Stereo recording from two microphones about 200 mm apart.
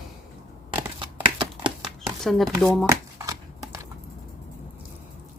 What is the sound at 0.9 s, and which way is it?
Crumpling, 25° right (ahead or behind).